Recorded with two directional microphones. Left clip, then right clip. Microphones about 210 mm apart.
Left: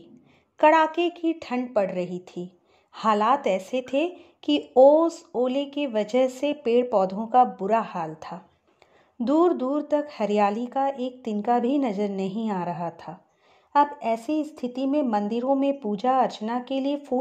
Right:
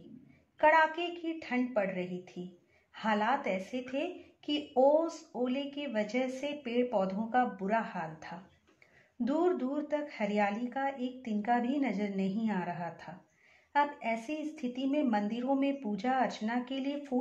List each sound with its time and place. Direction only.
0.6 s speech: 40° left (ahead or behind)